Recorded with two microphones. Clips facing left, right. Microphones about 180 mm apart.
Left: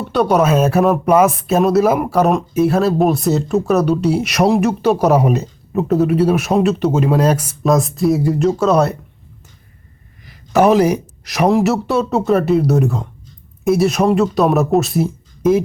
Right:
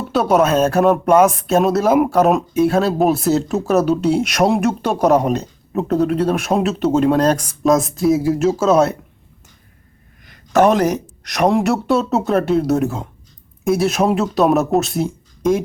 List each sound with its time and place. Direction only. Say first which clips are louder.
0.0 s speech: left 1 dB; centre (ahead or behind)
10.2 s speech: left 1 dB; 5° left (ahead or behind)